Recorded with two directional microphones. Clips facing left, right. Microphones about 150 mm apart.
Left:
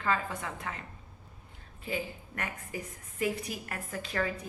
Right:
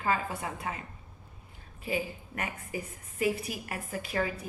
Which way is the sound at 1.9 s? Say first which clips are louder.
Right 3 dB; 15° right (ahead or behind).